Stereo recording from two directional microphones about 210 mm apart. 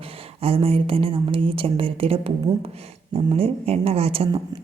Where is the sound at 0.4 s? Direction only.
25° right (ahead or behind).